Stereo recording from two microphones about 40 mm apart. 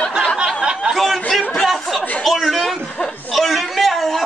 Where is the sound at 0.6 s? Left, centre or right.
Centre.